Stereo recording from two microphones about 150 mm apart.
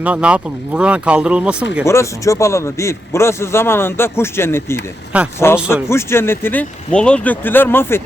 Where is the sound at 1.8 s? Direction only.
20° left (ahead or behind).